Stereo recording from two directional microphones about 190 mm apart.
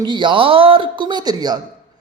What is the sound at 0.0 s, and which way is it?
Speech, 25° right (ahead or behind).